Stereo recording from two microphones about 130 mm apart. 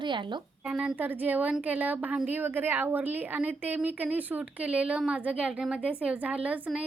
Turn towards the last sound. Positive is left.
turn(degrees=-10)  # may be behind; listen again after turning